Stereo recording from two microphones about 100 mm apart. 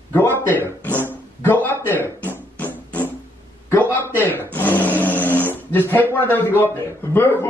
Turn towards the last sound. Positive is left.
turn(degrees=25)  # may be behind; listen again after turning